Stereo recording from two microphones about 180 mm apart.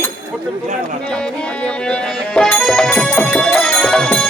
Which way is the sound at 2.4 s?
5° left (ahead or behind).